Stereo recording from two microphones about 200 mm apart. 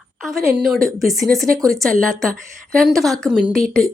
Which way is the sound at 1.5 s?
15° right (ahead or behind).